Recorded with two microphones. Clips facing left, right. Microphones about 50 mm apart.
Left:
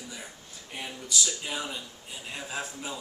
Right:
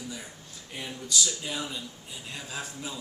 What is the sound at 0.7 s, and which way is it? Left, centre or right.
A man's voice, centre.